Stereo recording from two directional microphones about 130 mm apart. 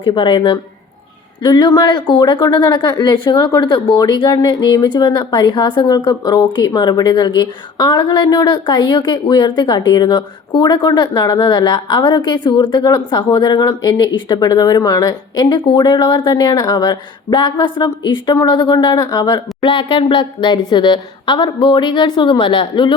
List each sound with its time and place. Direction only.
0.0 s speech: 40° left (ahead or behind)
19.6 s speech: 40° left (ahead or behind)